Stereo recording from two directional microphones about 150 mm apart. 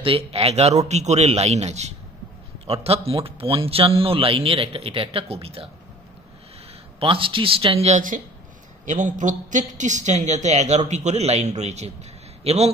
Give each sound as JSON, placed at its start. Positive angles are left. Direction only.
{"t": 0.0, "sound": "a woman's voice", "side_deg": -40}
{"t": 7.0, "sound": "a man's voice", "side_deg": -35}
{"t": 8.8, "sound": "a woman's voice", "side_deg": -55}